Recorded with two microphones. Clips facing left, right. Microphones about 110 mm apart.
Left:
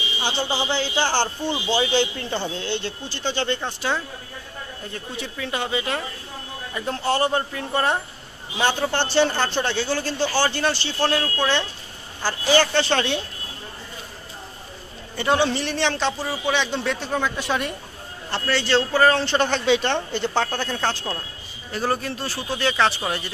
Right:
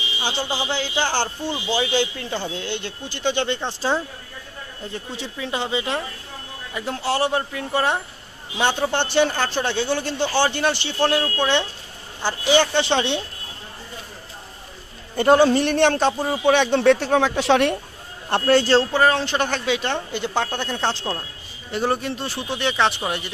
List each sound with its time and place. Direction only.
0.2 s a woman's voice: 10° right (ahead or behind)
3.8 s speech: 30° right (ahead or behind)
5.1 s speech: 25° right (ahead or behind)
6.7 s a woman's voice: 5° right (ahead or behind)
9.3 s speech: 5° right (ahead or behind)
9.8 s a woman's voice: 20° right (ahead or behind)
15.1 s speech: 45° right (ahead or behind); by 17.7 s 75° right (ahead or behind)
18.5 s speech: 45° right (ahead or behind)
18.8 s a woman's voice: 20° right (ahead or behind)